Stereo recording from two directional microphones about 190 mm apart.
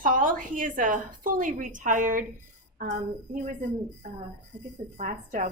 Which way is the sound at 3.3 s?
40° right (ahead or behind).